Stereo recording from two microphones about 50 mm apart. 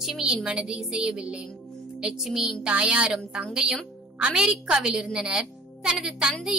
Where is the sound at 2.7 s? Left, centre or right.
Right.